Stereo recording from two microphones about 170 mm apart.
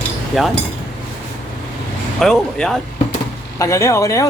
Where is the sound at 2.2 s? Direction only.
5° left (ahead or behind).